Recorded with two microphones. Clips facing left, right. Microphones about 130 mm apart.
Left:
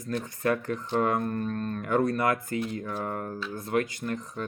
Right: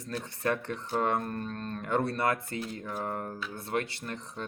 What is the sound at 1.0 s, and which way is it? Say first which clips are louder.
Speech: left 3 dB; 35° right (ahead or behind).